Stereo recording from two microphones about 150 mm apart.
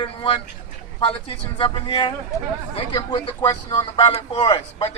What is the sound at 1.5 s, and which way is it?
Speech, 30° left (ahead or behind).